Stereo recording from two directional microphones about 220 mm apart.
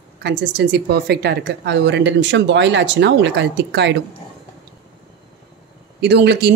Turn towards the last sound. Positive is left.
turn(degrees=-50)  # may be behind; listen again after turning